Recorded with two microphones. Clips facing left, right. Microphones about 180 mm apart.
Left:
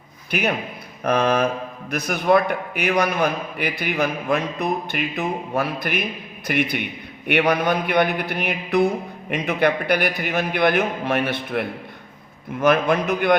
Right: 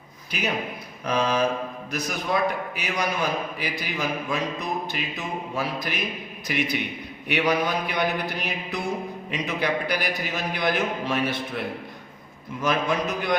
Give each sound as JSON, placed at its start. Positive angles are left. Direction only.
{"t": 0.3, "sound": "a man's voice", "side_deg": 60}